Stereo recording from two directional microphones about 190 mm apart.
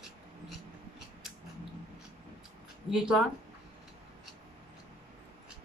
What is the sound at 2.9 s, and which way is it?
Speech, 5° right (ahead or behind).